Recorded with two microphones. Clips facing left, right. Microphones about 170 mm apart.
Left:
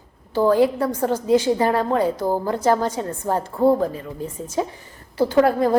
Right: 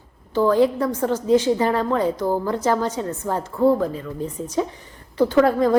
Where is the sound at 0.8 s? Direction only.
35° left (ahead or behind).